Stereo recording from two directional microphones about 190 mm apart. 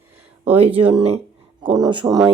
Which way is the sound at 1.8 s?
25° right (ahead or behind).